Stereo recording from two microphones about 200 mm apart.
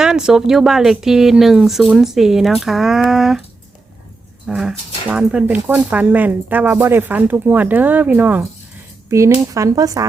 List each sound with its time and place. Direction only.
0.0 s speech: 5° right (ahead or behind)
4.4 s speech: centre (ahead or behind)